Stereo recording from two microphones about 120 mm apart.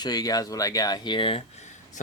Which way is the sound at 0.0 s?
35° left (ahead or behind).